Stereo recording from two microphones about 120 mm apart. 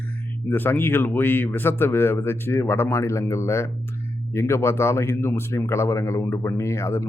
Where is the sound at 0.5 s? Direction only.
15° left (ahead or behind).